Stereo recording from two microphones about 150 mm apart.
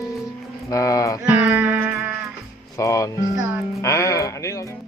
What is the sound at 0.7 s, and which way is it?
Mantra, 20° left (ahead or behind).